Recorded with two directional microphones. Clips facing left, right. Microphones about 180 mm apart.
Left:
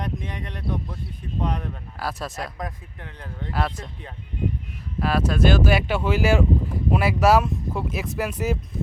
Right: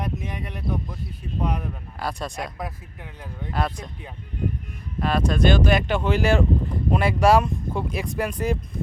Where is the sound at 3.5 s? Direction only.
5° left (ahead or behind).